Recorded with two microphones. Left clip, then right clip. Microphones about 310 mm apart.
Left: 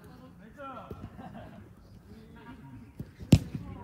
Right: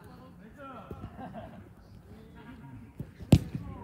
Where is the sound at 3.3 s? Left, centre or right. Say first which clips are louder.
Even; right.